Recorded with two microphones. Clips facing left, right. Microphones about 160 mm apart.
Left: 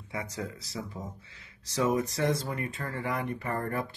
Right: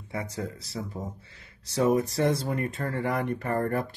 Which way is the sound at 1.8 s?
40° right (ahead or behind).